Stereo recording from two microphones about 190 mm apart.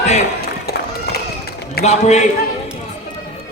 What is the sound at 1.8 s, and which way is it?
Speech, 35° left (ahead or behind).